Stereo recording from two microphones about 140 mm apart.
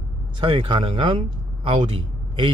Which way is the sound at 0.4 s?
35° right (ahead or behind).